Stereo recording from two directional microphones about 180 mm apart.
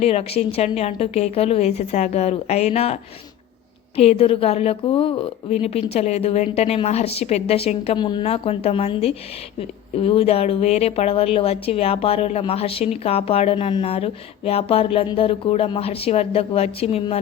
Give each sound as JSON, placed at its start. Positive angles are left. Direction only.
{"t": 0.0, "sound": "a woman's voice", "side_deg": 35}